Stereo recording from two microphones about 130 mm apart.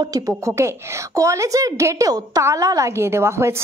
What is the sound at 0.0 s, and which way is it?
A woman's voice, 25° right (ahead or behind).